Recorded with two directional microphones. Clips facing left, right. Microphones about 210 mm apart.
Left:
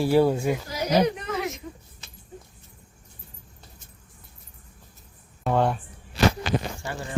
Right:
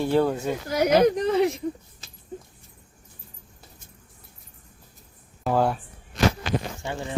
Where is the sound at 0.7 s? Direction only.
60° right (ahead or behind).